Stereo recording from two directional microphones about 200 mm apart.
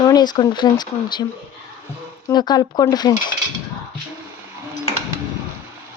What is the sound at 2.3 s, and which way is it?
Speech, 20° left (ahead or behind).